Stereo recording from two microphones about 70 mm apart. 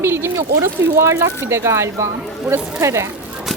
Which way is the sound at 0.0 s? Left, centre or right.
Right.